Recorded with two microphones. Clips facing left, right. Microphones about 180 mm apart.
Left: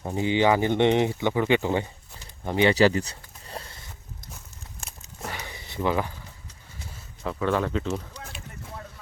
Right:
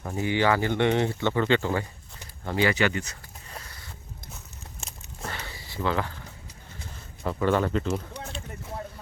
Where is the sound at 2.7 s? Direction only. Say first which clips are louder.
Left 6 dB; 35° left (ahead or behind).